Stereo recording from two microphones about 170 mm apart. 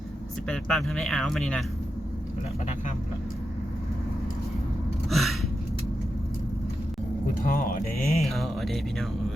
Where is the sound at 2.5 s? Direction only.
40° left (ahead or behind).